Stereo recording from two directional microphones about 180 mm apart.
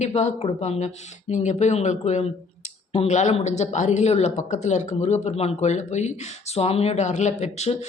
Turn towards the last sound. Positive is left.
turn(degrees=40)  # may be behind; listen again after turning